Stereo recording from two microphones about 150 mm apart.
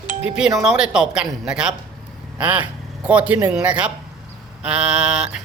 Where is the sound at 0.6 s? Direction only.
5° right (ahead or behind).